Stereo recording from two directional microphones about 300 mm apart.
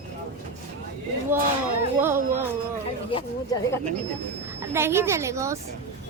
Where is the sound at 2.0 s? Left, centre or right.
Centre.